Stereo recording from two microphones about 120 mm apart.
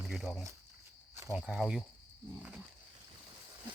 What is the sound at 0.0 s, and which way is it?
Speech, centre (ahead or behind).